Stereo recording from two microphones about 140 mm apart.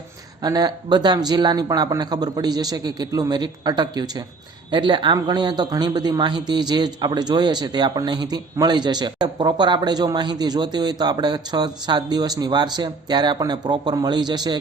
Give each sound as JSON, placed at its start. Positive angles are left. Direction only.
{"t": 0.4, "sound": "speech", "side_deg": -30}